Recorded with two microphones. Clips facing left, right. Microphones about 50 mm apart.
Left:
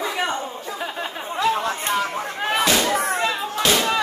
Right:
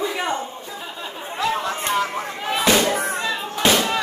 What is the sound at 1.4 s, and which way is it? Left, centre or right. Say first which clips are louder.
Chatter: left 2 dB; centre.